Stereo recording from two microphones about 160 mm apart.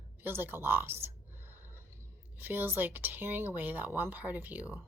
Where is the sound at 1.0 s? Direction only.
15° right (ahead or behind).